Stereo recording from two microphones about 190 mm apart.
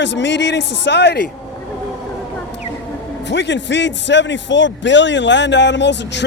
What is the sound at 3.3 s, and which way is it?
A man's voice, 65° left (ahead or behind).